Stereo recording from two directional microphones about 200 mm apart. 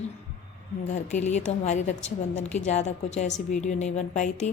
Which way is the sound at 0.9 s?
35° left (ahead or behind).